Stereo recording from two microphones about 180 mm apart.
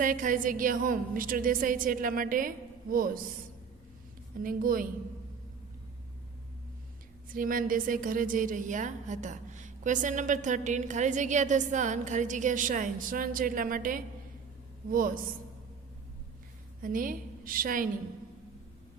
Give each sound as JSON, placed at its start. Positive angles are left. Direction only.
{"t": 0.0, "sound": "a woman's voice", "side_deg": -50}
{"t": 4.4, "sound": "a woman's voice", "side_deg": -50}
{"t": 7.3, "sound": "a woman's voice", "side_deg": -50}
{"t": 16.8, "sound": "a woman's voice", "side_deg": -50}